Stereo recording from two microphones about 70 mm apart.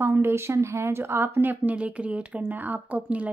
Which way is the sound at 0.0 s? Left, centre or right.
Right.